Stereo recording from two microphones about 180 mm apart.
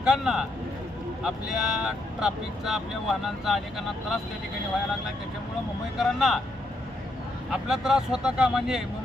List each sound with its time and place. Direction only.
0.0 s speech: 5° right (ahead or behind)
6.0 s speech: centre (ahead or behind)
7.5 s speech: centre (ahead or behind)